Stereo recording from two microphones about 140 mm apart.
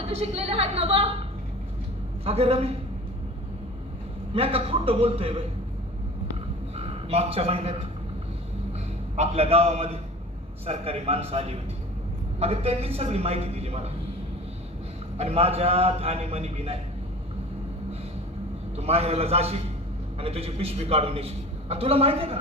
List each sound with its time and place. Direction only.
0.1 s a man's voice: 45° right (ahead or behind)
2.2 s a man's voice: 45° right (ahead or behind)
4.4 s a man's voice: 45° right (ahead or behind)
6.7 s a man's voice: 45° right (ahead or behind)
9.1 s a man's voice: 50° right (ahead or behind)
15.2 s a man's voice: 45° right (ahead or behind)
18.8 s a man's voice: 45° right (ahead or behind)